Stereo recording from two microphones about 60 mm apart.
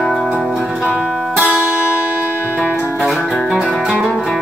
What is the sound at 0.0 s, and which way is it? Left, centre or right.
Music, centre.